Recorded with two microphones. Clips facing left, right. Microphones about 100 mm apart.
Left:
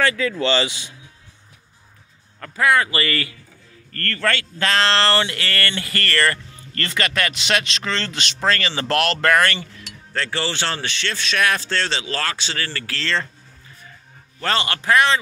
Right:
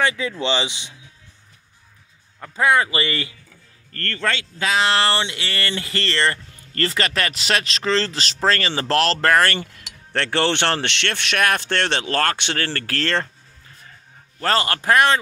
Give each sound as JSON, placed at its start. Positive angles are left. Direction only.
{"t": 0.0, "sound": "a sound", "side_deg": -15}
{"t": 2.5, "sound": "speech", "side_deg": -25}
{"t": 4.6, "sound": "a sound", "side_deg": -10}
{"t": 5.7, "sound": "speech", "side_deg": -25}
{"t": 10.1, "sound": "speech", "side_deg": -65}
{"t": 14.4, "sound": "a man's voice", "side_deg": -40}